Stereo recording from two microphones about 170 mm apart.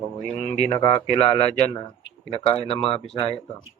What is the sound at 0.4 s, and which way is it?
Speech, 45° left (ahead or behind).